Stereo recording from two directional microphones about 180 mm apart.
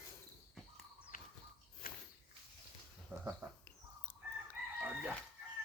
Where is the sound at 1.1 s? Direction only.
50° left (ahead or behind).